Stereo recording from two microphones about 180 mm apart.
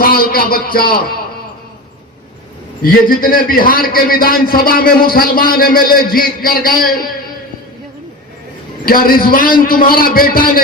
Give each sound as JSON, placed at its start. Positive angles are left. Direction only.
{"t": 0.0, "sound": "speech", "side_deg": 55}
{"t": 2.8, "sound": "a man's voice", "side_deg": 50}
{"t": 8.8, "sound": "a man's voice", "side_deg": 55}